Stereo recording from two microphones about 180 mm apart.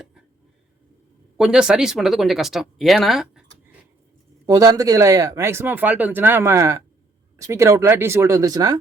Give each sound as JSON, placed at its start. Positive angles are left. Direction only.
{"t": 1.4, "sound": "speech", "side_deg": -5}
{"t": 4.4, "sound": "speech", "side_deg": -20}